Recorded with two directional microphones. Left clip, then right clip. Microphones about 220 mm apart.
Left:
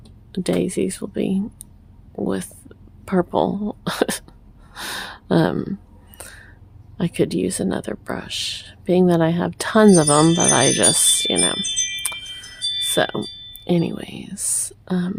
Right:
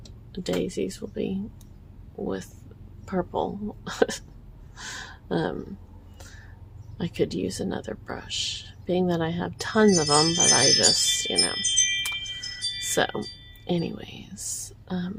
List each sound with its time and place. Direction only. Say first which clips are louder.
0.3 s speech: left 6 dB; 40° left (ahead or behind)
4.7 s a sound: left 9 dB; 50° left (ahead or behind)
6.9 s speech: left 6 dB; 40° left (ahead or behind)
10.2 s speech: left 5 dB; 30° left (ahead or behind)
10.5 s speech: left 3 dB; 50° left (ahead or behind)
12.5 s music: left 10 dB; 30° right (ahead or behind)
12.9 s speech: left 1 dB; 30° left (ahead or behind)